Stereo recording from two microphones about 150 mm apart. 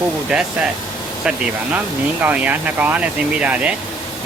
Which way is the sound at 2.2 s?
10° right (ahead or behind).